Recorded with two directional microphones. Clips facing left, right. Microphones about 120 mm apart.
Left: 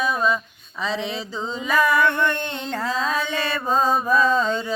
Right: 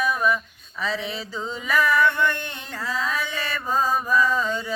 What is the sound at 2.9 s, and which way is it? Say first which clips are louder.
Mantra: left 2 dB; 20° left (ahead or behind).